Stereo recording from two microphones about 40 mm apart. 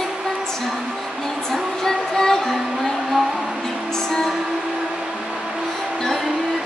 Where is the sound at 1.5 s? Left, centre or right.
Centre.